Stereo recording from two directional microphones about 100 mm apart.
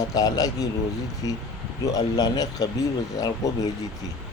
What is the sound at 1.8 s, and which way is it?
Speech, 35° left (ahead or behind).